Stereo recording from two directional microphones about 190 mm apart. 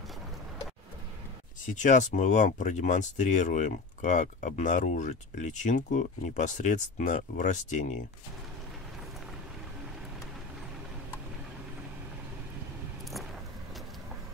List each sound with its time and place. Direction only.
1.8 s speech: 40° left (ahead or behind)